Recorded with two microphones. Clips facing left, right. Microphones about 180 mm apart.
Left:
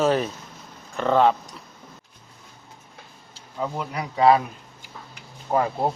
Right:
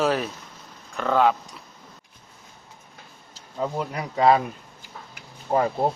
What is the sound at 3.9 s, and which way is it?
Speech, 45° right (ahead or behind).